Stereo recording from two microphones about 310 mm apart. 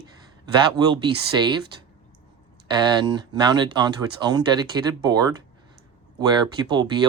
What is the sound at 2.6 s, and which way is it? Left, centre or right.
Speech, centre.